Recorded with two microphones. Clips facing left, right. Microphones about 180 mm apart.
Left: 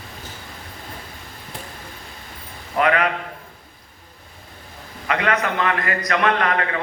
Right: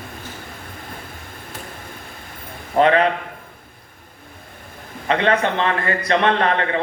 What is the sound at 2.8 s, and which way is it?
Speech, 30° right (ahead or behind).